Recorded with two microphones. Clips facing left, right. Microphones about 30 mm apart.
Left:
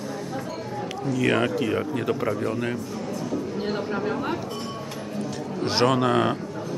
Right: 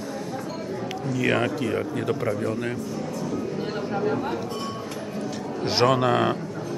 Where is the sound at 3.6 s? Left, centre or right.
Centre.